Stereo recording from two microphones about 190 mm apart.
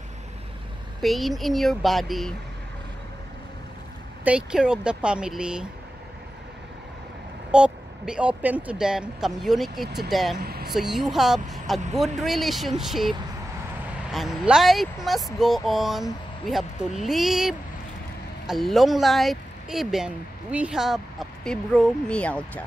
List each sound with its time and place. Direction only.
1.0 s speech: centre (ahead or behind)
4.2 s speech: 5° right (ahead or behind)
7.5 s speech: 5° right (ahead or behind)
10.4 s vehicle: 55° right (ahead or behind)
10.7 s speech: centre (ahead or behind)
14.1 s speech: 5° right (ahead or behind)